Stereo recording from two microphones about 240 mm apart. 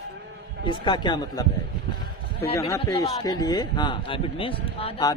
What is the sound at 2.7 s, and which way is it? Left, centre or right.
Speech, centre.